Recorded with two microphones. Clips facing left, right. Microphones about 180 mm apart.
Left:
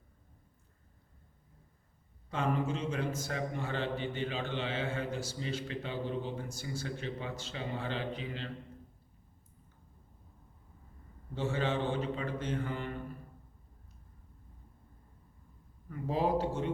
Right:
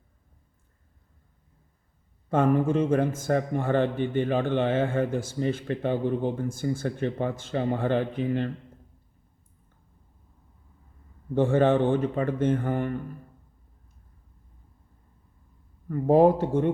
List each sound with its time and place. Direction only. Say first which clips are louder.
2.3 s a man's voice: right 11 dB; 50° right (ahead or behind)
11.3 s a man's voice: right 12 dB; 50° right (ahead or behind)
15.9 s a man's voice: right 12 dB; 55° right (ahead or behind)